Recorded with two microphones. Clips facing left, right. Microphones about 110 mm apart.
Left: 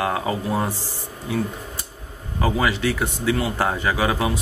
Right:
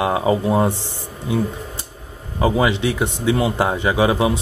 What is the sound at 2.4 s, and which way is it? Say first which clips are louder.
A man's voice: right 4 dB; 20° right (ahead or behind).